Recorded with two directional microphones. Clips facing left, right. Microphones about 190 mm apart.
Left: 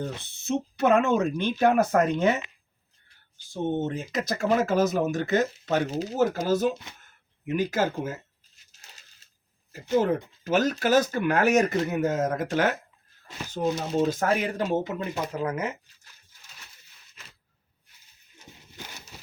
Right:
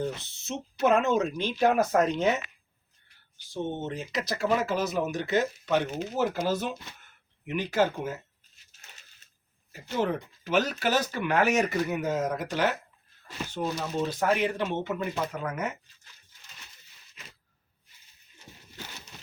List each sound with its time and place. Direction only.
0.2 s speech: 55° left (ahead or behind)
3.5 s speech: 50° left (ahead or behind)
5.7 s speech: 35° left (ahead or behind)
8.9 s a sound: 35° left (ahead or behind)
10.0 s speech: 45° left (ahead or behind)
13.6 s speech: 20° left (ahead or behind)
14.0 s speech: 45° left (ahead or behind)